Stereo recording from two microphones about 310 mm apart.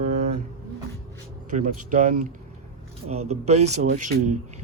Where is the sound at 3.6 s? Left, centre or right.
Right.